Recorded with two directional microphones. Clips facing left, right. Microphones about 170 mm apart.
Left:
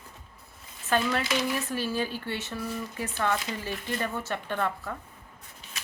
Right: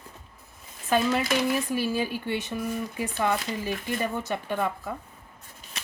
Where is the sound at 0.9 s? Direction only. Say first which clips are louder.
Right 3 dB; 15° right (ahead or behind).